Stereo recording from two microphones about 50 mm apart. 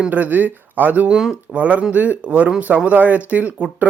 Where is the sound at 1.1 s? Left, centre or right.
Centre.